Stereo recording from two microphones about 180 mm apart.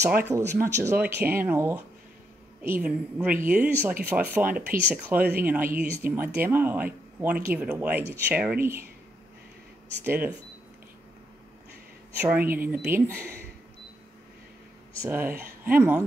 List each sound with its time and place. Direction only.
0.2 s speech: 15° right (ahead or behind)
10.0 s speech: 10° right (ahead or behind)
12.2 s speech: 10° right (ahead or behind)
15.0 s speech: 10° right (ahead or behind)